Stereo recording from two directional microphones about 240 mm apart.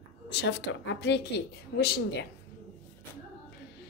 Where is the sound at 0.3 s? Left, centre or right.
Left.